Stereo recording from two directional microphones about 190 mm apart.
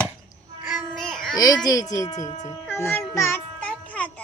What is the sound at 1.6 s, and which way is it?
Speech, 20° left (ahead or behind).